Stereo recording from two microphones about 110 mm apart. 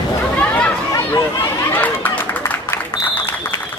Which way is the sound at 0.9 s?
35° left (ahead or behind).